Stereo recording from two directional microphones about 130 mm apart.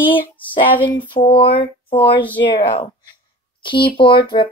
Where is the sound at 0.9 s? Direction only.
40° left (ahead or behind).